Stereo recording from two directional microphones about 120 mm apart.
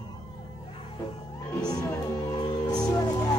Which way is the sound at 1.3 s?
30° left (ahead or behind).